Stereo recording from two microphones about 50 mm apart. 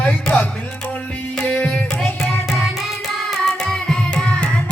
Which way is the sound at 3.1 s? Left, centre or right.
Centre.